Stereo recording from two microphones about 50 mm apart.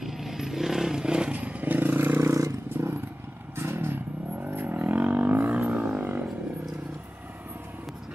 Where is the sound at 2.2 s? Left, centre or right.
Right.